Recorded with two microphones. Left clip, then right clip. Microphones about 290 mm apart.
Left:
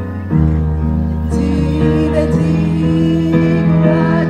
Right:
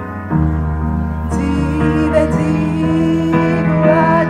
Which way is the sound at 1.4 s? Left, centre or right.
Centre.